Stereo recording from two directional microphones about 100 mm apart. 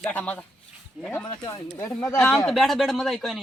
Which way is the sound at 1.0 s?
5° right (ahead or behind).